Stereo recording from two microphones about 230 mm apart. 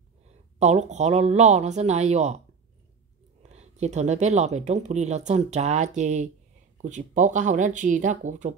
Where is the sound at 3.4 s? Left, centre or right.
Right.